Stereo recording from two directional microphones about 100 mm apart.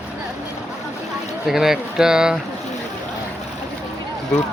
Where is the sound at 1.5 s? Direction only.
5° right (ahead or behind).